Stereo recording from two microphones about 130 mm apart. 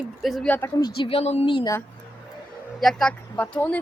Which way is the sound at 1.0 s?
45° left (ahead or behind).